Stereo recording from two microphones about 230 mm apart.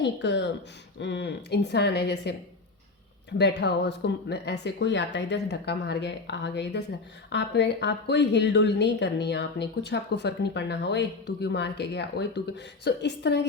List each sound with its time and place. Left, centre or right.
0.0 s a woman's voice: left
3.3 s a woman's voice: left